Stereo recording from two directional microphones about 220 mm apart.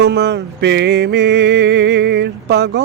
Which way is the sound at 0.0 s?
50° right (ahead or behind).